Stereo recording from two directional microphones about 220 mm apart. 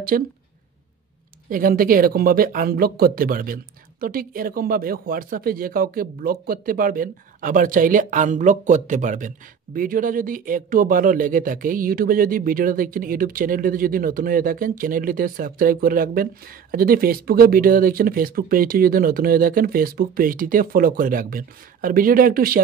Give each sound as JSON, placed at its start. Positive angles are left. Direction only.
{"t": 0.1, "sound": "speech", "side_deg": -40}
{"t": 1.5, "sound": "speech", "side_deg": -40}